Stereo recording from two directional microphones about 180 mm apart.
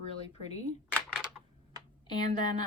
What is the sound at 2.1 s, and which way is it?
Speech, 25° left (ahead or behind).